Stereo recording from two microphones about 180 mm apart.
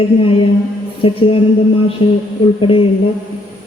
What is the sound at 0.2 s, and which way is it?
Speech, 30° left (ahead or behind).